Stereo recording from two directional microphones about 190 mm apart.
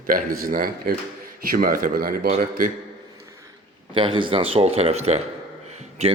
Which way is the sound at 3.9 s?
25° right (ahead or behind).